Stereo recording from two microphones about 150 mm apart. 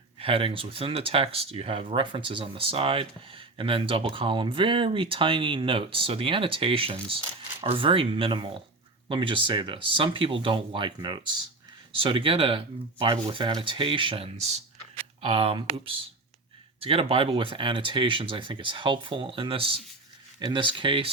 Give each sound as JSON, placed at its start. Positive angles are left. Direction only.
{"t": 0.2, "sound": "speech", "side_deg": -35}